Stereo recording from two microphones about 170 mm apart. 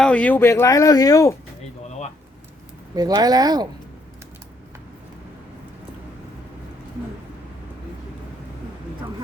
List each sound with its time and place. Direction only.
0.0 s speech: 5° left (ahead or behind)
2.9 s speech: 25° right (ahead or behind)